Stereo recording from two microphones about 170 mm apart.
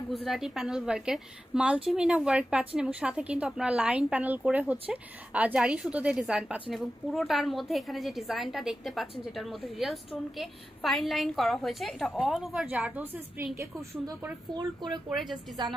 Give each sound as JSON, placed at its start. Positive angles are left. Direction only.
{"t": 0.1, "sound": "a woman's voice", "side_deg": 0}
{"t": 14.5, "sound": "speech", "side_deg": -25}
{"t": 15.0, "sound": "a woman's voice", "side_deg": 0}
{"t": 15.6, "sound": "speech", "side_deg": -25}